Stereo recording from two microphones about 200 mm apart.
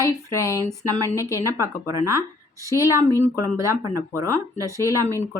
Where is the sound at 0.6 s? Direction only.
15° right (ahead or behind).